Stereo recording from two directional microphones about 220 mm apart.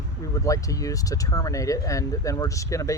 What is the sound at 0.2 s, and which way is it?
Speech, 15° left (ahead or behind).